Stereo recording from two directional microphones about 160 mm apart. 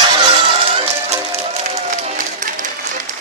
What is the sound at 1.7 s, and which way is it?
Music, 50° right (ahead or behind).